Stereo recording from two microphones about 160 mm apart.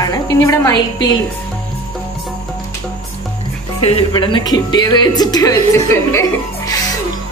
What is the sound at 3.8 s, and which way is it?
A woman's voice, 35° left (ahead or behind).